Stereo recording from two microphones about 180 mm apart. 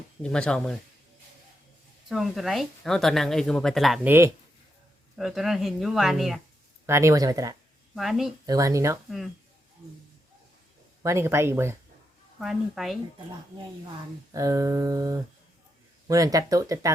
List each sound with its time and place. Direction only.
0.2 s speech: 5° left (ahead or behind)
2.0 s speech: centre (ahead or behind)
5.1 s speech: centre (ahead or behind)
6.8 s speech: 15° right (ahead or behind)
7.9 s speech: centre (ahead or behind)
8.4 s speech: 20° right (ahead or behind)
9.0 s speech: centre (ahead or behind)
11.0 s speech: 15° right (ahead or behind)
12.4 s speech: centre (ahead or behind)
14.3 s speech: 20° right (ahead or behind)